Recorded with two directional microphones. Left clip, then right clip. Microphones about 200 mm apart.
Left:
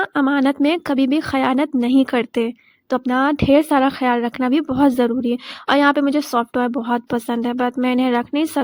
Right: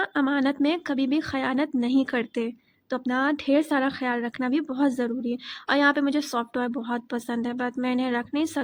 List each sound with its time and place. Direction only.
0.0 s speech: 30° left (ahead or behind)